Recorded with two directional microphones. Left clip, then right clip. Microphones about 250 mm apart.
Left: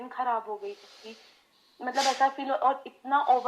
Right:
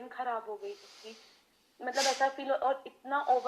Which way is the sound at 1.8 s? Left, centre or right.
Left.